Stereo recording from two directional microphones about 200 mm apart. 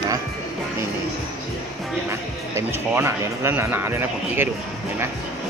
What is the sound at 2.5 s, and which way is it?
A man's voice, 10° right (ahead or behind).